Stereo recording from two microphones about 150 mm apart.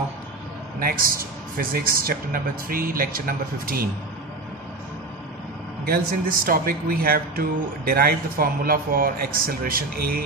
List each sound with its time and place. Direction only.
0.7 s a man's voice: 75° right (ahead or behind)
5.9 s a man's voice: 75° right (ahead or behind)